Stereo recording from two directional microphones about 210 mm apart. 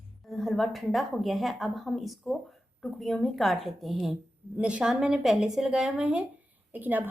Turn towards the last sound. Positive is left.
turn(degrees=-10)  # may be behind; listen again after turning